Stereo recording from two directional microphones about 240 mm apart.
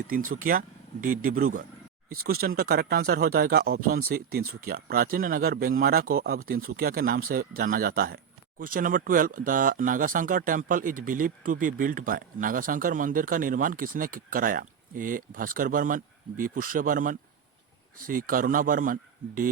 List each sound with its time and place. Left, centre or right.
0.3 s speech: right